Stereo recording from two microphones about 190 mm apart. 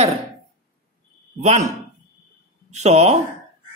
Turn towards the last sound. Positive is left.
turn(degrees=-35)  # may be behind; listen again after turning